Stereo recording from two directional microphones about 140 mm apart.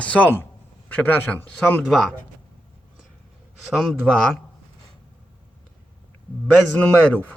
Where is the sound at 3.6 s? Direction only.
Centre (ahead or behind).